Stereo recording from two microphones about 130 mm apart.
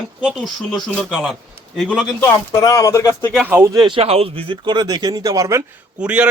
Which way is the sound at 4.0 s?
50° right (ahead or behind).